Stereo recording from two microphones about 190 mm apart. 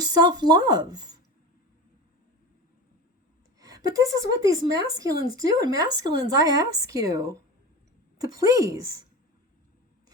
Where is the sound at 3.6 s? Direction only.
20° right (ahead or behind).